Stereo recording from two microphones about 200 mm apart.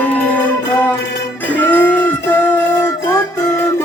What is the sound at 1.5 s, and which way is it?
Music, 10° left (ahead or behind).